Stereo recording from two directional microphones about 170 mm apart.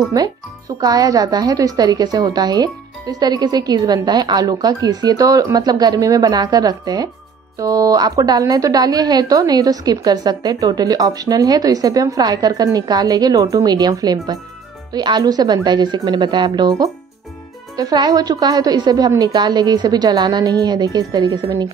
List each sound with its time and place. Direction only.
0.2 s a woman's voice: 20° right (ahead or behind)